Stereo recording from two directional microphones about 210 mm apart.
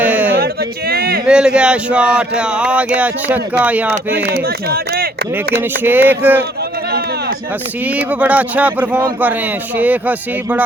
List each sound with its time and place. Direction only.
0.0 s a sound: 10° right (ahead or behind)
0.3 s a sound: 45° right (ahead or behind)
1.3 s speech: 5° right (ahead or behind)
4.2 s speech: 50° right (ahead or behind)
5.8 s speech: 10° right (ahead or behind)
7.9 s speech: 5° right (ahead or behind)